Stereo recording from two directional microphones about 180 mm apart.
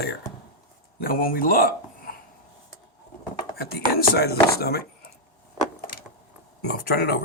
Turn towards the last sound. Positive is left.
turn(degrees=60)  # may be behind; listen again after turning